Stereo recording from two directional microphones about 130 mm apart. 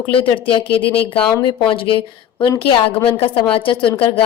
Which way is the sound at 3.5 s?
40° left (ahead or behind).